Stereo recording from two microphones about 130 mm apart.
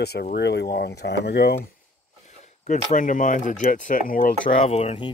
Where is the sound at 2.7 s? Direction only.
85° left.